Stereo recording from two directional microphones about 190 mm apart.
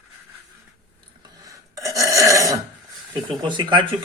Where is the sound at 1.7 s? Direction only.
15° right (ahead or behind).